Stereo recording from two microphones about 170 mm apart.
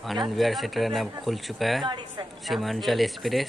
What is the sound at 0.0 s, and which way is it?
Speech, centre (ahead or behind).